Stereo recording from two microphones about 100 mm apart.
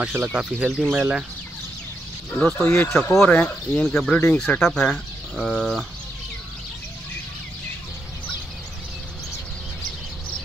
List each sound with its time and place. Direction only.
0.0 s speech: 10° right (ahead or behind)
2.3 s speech: 15° left (ahead or behind)
3.0 s speech: 10° left (ahead or behind)
4.4 s speech: 5° left (ahead or behind)